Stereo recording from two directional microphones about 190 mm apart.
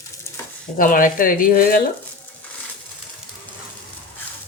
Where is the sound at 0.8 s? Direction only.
45° left (ahead or behind).